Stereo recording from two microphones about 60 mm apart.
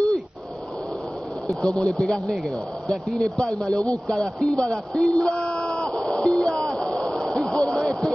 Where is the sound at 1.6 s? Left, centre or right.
Centre.